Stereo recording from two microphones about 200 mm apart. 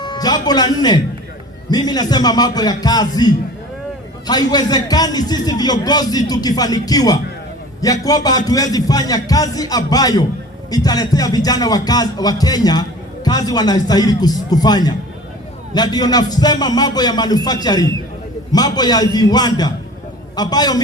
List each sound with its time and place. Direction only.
0.0 s a man's voice: 20° left (ahead or behind)